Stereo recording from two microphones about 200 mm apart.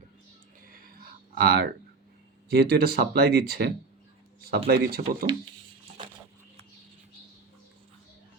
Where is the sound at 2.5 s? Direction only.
50° right (ahead or behind).